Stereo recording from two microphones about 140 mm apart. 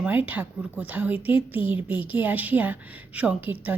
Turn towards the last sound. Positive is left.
turn(degrees=-10)  # may be behind; listen again after turning